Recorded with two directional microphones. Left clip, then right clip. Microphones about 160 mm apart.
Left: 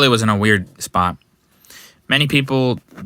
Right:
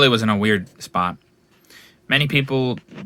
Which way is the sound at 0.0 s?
30° left (ahead or behind).